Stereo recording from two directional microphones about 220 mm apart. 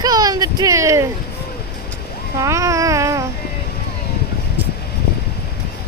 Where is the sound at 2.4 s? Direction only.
15° right (ahead or behind).